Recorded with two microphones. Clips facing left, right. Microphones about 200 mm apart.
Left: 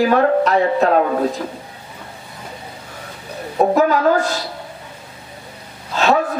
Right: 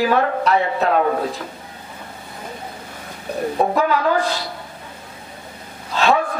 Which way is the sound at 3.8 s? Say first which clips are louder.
Left 5 dB; 45° left (ahead or behind).